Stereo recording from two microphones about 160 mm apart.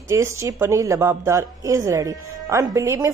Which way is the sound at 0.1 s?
20° right (ahead or behind).